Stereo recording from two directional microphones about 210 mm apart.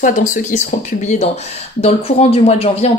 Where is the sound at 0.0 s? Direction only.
40° left (ahead or behind).